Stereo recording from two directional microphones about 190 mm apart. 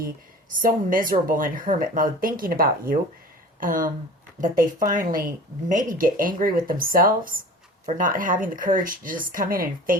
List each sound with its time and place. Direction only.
0.5 s speech: 45° right (ahead or behind)